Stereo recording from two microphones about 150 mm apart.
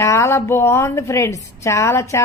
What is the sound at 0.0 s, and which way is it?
A woman's voice, 20° left (ahead or behind).